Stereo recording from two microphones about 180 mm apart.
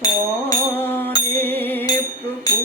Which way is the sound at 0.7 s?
10° left (ahead or behind).